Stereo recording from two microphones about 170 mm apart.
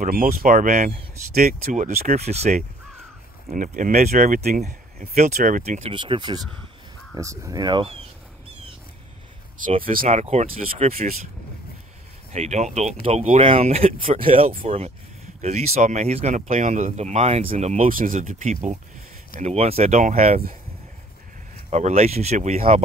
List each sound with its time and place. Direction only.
0.0 s speech: 55° right (ahead or behind)
1.6 s speech: 45° right (ahead or behind)
5.1 s speech: 45° right (ahead or behind); by 7.9 s 25° right (ahead or behind)
10.0 s speech: 40° right (ahead or behind)
12.3 s speech: 40° right (ahead or behind)
17.8 s speech: 55° right (ahead or behind)
21.6 s speech: 40° right (ahead or behind)